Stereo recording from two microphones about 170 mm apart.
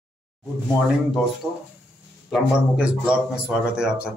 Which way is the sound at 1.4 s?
5° right (ahead or behind).